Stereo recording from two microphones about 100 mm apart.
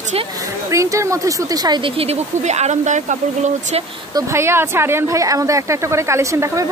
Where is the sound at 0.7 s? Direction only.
30° right (ahead or behind).